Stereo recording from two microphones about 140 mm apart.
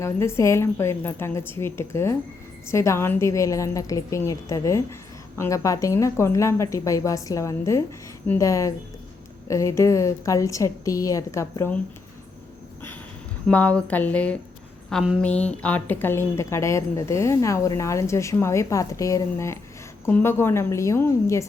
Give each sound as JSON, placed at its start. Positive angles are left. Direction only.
{"t": 0.0, "sound": "a woman's voice", "side_deg": 20}
{"t": 13.5, "sound": "a woman's voice", "side_deg": 10}